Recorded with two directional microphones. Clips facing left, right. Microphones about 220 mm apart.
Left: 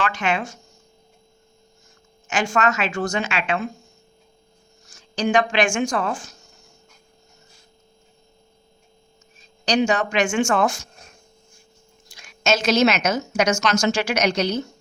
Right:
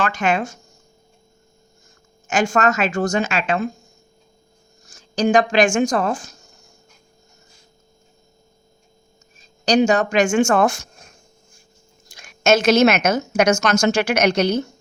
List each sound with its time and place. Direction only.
0.0 s a woman's voice: 45° right (ahead or behind)
2.2 s a woman's voice: 45° right (ahead or behind)
4.9 s speech: 40° right (ahead or behind)
9.4 s a woman's voice: 40° right (ahead or behind)
12.0 s a woman's voice: 45° right (ahead or behind)